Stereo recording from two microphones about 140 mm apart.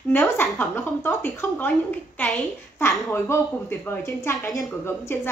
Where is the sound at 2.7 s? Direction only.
20° left (ahead or behind).